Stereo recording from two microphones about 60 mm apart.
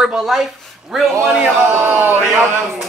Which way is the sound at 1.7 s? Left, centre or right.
Right.